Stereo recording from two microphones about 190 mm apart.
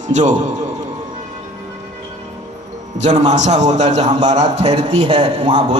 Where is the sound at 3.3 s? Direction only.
35° right (ahead or behind).